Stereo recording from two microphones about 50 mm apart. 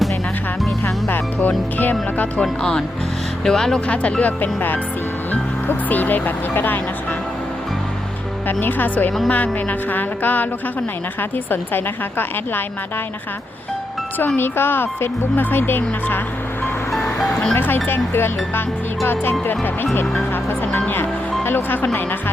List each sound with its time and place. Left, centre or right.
1.4 s music: left
2.4 s speech: centre
3.8 s speech: left
5.3 s music: left
6.5 s speech: left
8.4 s music: left
11.2 s speech: left
14.3 s speech: left
17.2 s speech: centre
17.5 s speech: left
21.4 s speech: left